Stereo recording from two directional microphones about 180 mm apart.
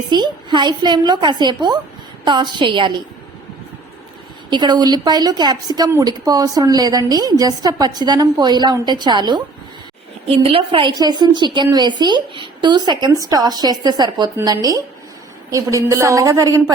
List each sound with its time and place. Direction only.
0.1 s speech: 25° right (ahead or behind)
4.4 s speech: 25° right (ahead or behind)